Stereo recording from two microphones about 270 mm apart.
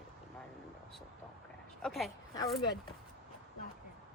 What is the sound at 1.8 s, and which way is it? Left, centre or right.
Speech, centre.